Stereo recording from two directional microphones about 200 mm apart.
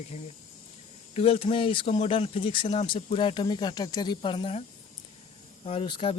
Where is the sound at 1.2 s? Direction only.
30° left (ahead or behind).